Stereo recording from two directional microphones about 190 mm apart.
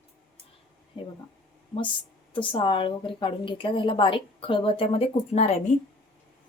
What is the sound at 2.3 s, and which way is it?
A woman's voice, 25° left (ahead or behind).